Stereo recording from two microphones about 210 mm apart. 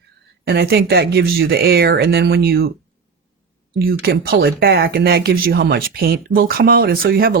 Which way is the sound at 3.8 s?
45° right (ahead or behind).